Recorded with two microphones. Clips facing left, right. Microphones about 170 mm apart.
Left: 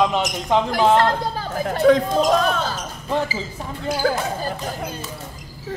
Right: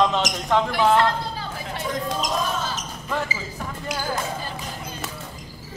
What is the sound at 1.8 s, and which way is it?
Speech, 65° left (ahead or behind).